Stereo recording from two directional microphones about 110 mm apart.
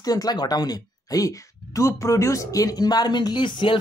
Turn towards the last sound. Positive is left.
turn(degrees=45)  # may be behind; listen again after turning